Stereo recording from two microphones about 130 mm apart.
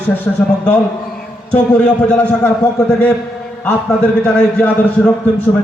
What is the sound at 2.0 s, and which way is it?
Speech, 10° left (ahead or behind).